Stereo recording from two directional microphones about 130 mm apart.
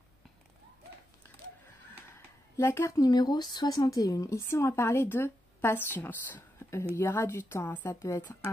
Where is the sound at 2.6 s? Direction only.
20° left (ahead or behind).